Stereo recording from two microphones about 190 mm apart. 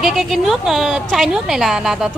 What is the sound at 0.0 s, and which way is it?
A woman's voice, centre (ahead or behind).